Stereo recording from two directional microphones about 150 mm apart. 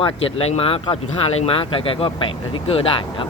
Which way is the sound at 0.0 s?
40° left (ahead or behind).